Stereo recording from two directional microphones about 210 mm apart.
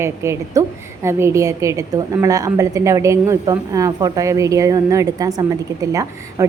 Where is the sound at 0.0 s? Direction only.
15° right (ahead or behind).